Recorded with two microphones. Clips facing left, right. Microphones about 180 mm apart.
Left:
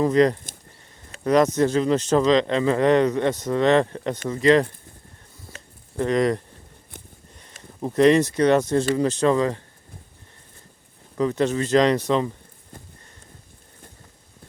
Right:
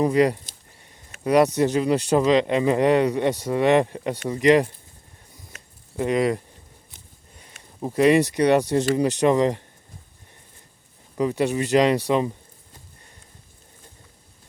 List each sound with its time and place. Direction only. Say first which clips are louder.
0.0 s speech: left 1 dB; 10° right (ahead or behind)
6.0 s speech: left 1 dB; 5° right (ahead or behind)
7.8 s speech: left 1 dB; 10° right (ahead or behind)
11.2 s speech: left 1 dB; 15° right (ahead or behind)